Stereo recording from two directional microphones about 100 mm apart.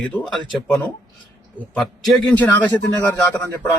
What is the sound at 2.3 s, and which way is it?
Speech, 20° left (ahead or behind).